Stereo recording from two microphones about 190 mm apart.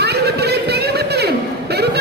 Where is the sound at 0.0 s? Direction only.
60° right (ahead or behind).